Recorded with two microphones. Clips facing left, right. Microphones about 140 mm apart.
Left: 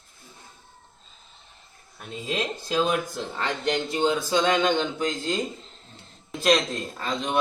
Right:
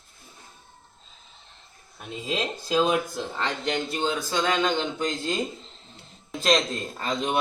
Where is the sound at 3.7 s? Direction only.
15° left (ahead or behind).